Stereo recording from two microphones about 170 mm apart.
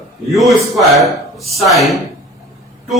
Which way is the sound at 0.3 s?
Centre (ahead or behind).